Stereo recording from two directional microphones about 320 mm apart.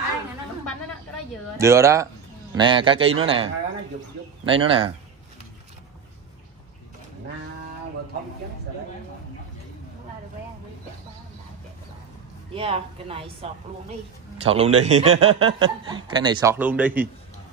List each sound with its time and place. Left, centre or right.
1.6 s speech: centre
4.5 s speech: centre
12.5 s speech: centre